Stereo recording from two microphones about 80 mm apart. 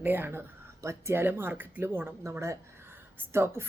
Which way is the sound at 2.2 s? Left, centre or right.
Right.